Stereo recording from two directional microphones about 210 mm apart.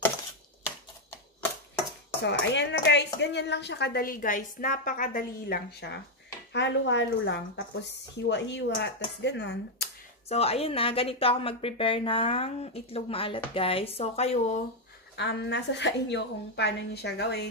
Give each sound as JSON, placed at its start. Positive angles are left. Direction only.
{"t": 2.2, "sound": "speech", "side_deg": 55}
{"t": 10.2, "sound": "speech", "side_deg": 30}
{"t": 15.1, "sound": "speech", "side_deg": 55}